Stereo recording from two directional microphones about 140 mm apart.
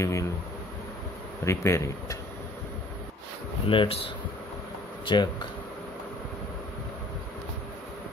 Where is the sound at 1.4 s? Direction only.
20° left (ahead or behind).